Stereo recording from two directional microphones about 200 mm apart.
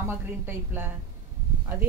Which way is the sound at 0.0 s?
10° right (ahead or behind).